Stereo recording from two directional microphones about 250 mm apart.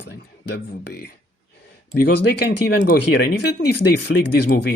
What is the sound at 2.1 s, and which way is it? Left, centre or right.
Speech, left.